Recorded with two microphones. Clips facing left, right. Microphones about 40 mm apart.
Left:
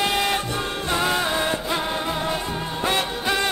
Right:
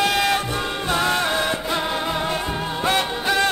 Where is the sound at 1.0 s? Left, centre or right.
Right.